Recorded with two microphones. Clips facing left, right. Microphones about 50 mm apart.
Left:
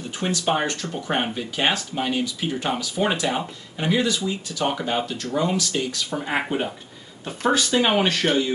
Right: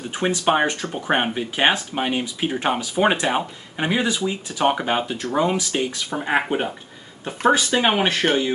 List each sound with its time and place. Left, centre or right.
0.1 s speech: right